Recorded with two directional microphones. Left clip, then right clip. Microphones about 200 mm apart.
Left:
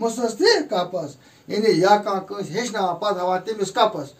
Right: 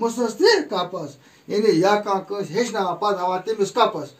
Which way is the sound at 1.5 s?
15° left (ahead or behind).